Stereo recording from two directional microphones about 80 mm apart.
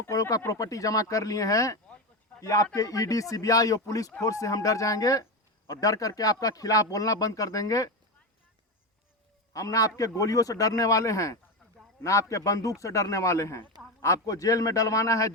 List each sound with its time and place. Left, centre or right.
0.1 s speech: left
9.5 s speech: left